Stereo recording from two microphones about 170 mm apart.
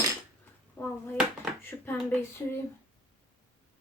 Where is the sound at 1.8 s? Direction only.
15° left (ahead or behind).